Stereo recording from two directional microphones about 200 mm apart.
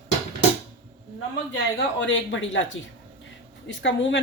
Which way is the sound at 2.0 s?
70° left (ahead or behind).